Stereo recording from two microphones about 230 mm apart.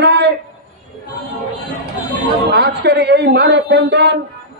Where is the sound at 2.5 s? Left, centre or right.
Right.